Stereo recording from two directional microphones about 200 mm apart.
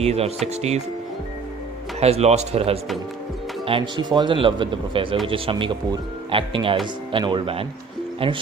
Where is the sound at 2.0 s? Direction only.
30° right (ahead or behind).